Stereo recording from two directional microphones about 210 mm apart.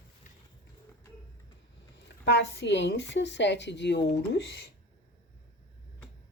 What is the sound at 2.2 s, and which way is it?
A woman's voice, 55° left (ahead or behind).